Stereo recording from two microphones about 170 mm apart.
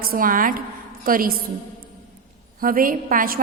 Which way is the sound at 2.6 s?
55° right (ahead or behind).